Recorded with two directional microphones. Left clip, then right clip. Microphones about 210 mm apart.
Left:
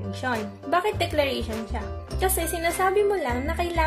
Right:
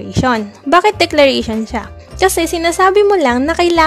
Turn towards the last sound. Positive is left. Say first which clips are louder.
# right 14 dB
turn(degrees=-50)  # may be behind; listen again after turning